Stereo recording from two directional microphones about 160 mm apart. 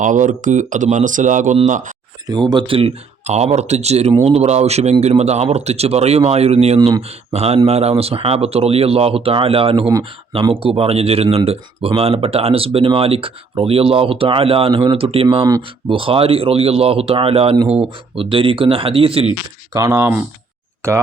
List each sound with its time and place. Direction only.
0.0 s speech: 55° right (ahead or behind)
2.2 s speech: 25° right (ahead or behind)
6.7 s speech: 25° right (ahead or behind)
7.3 s speech: 40° right (ahead or behind)
19.7 s speech: 20° right (ahead or behind)